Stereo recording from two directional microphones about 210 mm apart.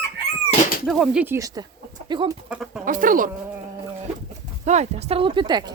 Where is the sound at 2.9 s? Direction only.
40° right (ahead or behind).